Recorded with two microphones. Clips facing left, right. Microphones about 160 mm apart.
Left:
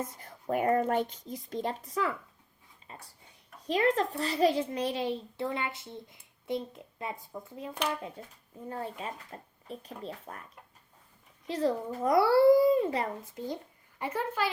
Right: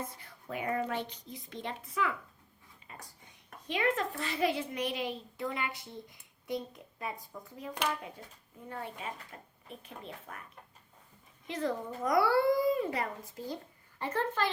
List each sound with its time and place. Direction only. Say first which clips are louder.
0.0 s a child's voice: left 5 dB; 45° left (ahead or behind)
11.4 s a child's voice: left 5 dB; 30° left (ahead or behind)
14.0 s a woman's voice: left 1 dB; 10° left (ahead or behind)